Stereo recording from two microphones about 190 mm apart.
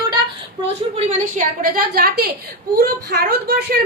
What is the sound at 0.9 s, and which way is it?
A woman's voice, 45° right (ahead or behind).